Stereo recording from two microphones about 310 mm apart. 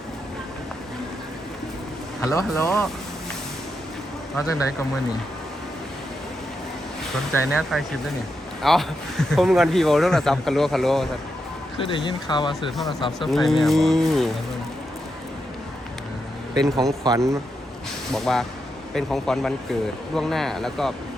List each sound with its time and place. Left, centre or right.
2.2 s speech: centre
7.5 s speech: centre
11.8 s speech: centre
12.7 s speech: centre
16.6 s speech: centre
18.1 s speech: centre